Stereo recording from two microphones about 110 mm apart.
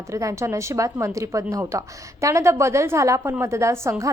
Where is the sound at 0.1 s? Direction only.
30° right (ahead or behind).